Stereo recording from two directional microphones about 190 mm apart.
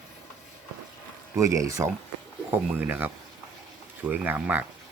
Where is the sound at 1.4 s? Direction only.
15° right (ahead or behind).